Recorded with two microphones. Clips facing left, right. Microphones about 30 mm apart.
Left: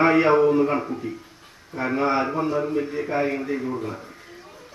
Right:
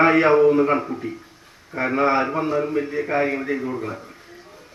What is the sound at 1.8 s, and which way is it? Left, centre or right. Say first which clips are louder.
A man's voice: right 3 dB; right.